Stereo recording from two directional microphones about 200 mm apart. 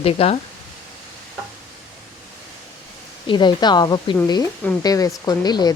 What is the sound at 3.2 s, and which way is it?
A woman's voice, 20° left (ahead or behind).